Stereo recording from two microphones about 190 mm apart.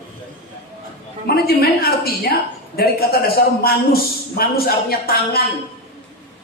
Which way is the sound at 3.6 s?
50° left (ahead or behind).